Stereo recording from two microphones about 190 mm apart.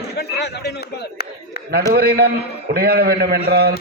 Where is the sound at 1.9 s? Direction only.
55° right (ahead or behind).